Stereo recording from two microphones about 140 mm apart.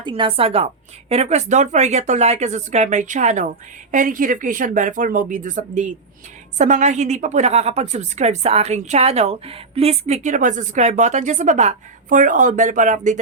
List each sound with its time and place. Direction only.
0.0 s a woman's voice: 40° right (ahead or behind); by 3.4 s 60° right (ahead or behind)
3.9 s a woman's voice: 70° right (ahead or behind)